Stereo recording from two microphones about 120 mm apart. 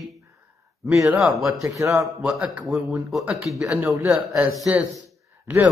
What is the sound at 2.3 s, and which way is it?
A man's voice, 10° right (ahead or behind).